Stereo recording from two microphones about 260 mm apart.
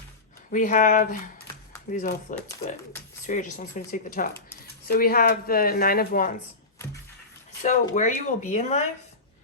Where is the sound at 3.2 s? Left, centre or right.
Left.